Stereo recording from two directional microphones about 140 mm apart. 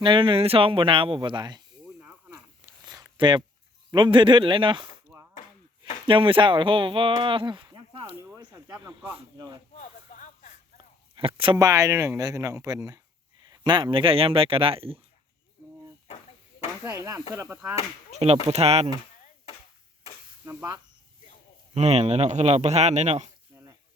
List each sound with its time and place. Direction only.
0.0 s speech: 35° right (ahead or behind)
2.0 s a sound: 5° right (ahead or behind)
2.8 s a sound: 30° right (ahead or behind)
3.9 s speech: 35° right (ahead or behind)
6.1 s speech: 40° right (ahead or behind)
8.5 s speech: 20° right (ahead or behind)
9.7 s a sound: 65° left (ahead or behind)
11.1 s a sound: 40° right (ahead or behind)
11.5 s speech: 25° right (ahead or behind); by 15.0 s 40° right (ahead or behind)
16.8 s speech: 20° right (ahead or behind)
18.1 s a man's voice: 50° right (ahead or behind)
20.4 s speech: 15° right (ahead or behind)
21.8 s a man's voice: 50° right (ahead or behind)